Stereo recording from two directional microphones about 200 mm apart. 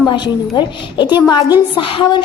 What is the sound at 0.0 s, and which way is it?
A woman's voice, 20° left (ahead or behind).